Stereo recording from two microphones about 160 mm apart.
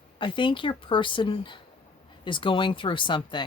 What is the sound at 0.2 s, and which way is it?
Speech, 30° left (ahead or behind).